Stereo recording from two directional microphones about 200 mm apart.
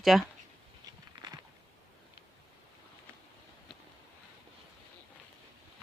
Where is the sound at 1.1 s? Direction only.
25° right (ahead or behind).